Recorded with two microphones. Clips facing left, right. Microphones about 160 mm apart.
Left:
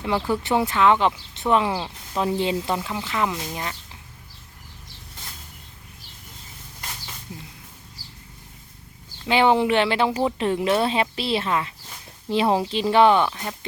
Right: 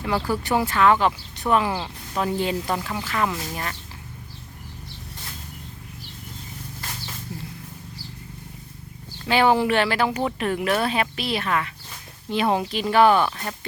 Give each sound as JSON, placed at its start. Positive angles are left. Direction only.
{"t": 0.3, "sound": "speech", "side_deg": 25}
{"t": 9.2, "sound": "speech", "side_deg": 20}